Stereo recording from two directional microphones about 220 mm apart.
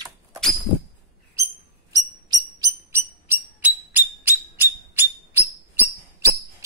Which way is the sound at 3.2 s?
10° right (ahead or behind).